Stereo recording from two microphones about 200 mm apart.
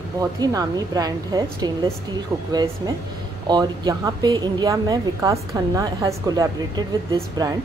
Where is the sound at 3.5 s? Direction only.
20° right (ahead or behind).